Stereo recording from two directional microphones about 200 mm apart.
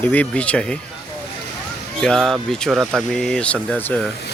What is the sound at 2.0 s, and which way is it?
Speech, 5° left (ahead or behind).